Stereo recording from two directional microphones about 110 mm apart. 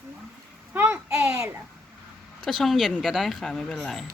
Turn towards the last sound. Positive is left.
turn(degrees=0)  # may be behind; listen again after turning